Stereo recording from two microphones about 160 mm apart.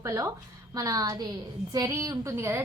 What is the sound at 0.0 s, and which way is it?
A woman's voice, 20° right (ahead or behind).